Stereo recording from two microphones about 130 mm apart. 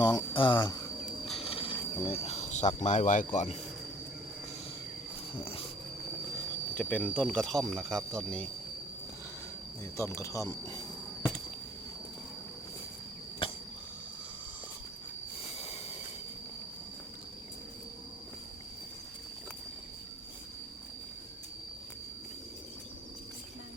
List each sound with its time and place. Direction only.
0.0 s speech: 35° left (ahead or behind)
1.3 s cricket: 50° left (ahead or behind); by 3.2 s 75° left (ahead or behind)
5.3 s insect: 45° left (ahead or behind)
6.7 s speech: 10° left (ahead or behind)
10.0 s speech: 25° left (ahead or behind)
13.4 s a sound: 45° left (ahead or behind)
15.4 s a sound: 50° left (ahead or behind)